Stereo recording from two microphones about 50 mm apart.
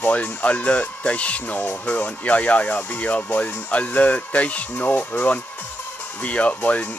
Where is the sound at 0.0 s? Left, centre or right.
Left.